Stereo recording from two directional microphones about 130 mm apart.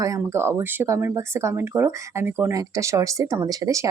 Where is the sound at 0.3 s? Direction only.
20° right (ahead or behind).